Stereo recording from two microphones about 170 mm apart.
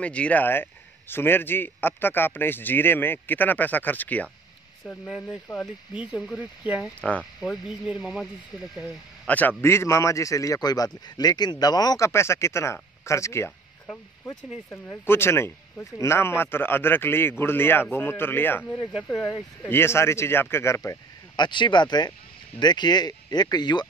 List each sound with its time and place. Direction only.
0.0 s a man's voice: 5° left (ahead or behind)
9.3 s a man's voice: 10° left (ahead or behind); by 23.9 s 25° left (ahead or behind)